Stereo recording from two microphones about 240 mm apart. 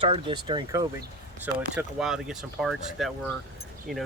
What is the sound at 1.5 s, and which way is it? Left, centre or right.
Speech, centre.